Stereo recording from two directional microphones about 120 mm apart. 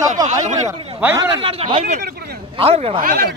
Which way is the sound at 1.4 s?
50° right (ahead or behind).